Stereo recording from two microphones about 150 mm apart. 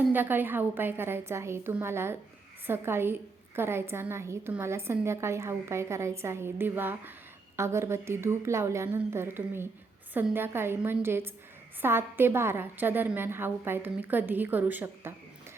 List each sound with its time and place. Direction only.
0.1 s a woman's voice: 15° right (ahead or behind)